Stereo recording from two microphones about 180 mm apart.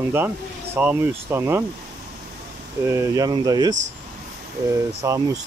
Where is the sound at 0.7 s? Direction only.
10° right (ahead or behind).